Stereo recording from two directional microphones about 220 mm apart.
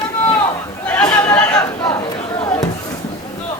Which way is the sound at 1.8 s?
20° left (ahead or behind).